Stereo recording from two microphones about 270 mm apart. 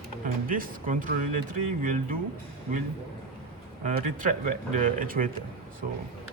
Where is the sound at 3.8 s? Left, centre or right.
Right.